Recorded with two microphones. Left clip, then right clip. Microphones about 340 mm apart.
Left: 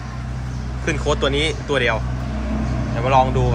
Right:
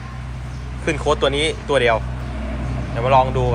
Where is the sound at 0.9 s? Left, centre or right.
Centre.